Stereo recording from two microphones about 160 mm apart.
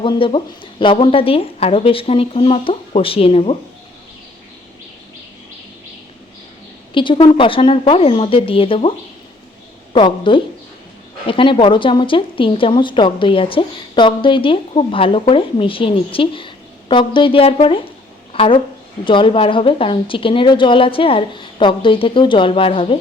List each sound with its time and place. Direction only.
0.0 s speech: 30° left (ahead or behind)
6.9 s speech: 30° left (ahead or behind)
9.9 s a woman's voice: 30° left (ahead or behind)